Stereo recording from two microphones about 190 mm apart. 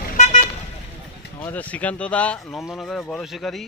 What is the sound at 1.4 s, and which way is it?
Speech, 10° left (ahead or behind).